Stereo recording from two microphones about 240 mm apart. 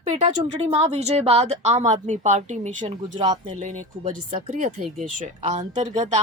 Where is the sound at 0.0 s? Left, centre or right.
Right.